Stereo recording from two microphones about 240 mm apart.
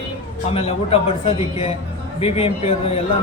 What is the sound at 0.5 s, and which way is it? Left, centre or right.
Speech, left.